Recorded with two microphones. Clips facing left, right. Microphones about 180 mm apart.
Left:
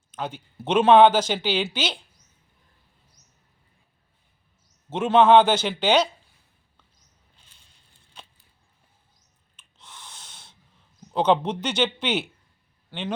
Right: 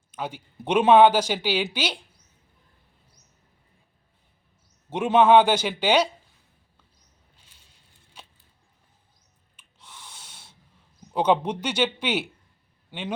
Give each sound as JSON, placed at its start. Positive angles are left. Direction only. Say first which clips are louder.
{"t": 0.1, "sound": "speech", "louder": "left 1 dB", "side_deg": -10}
{"t": 4.9, "sound": "speech", "louder": "left 1 dB", "side_deg": -10}
{"t": 7.3, "sound": "a sound", "louder": "right 1 dB", "side_deg": -10}
{"t": 9.6, "sound": "breathing", "louder": "left 1 dB", "side_deg": -10}
{"t": 11.1, "sound": "a man's voice", "louder": "left 1 dB", "side_deg": -10}